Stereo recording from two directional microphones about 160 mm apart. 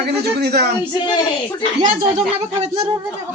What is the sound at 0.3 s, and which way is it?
Speech, 90° right.